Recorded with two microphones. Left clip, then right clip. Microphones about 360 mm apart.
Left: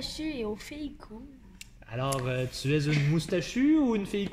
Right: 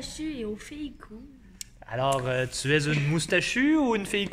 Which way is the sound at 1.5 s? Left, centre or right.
Centre.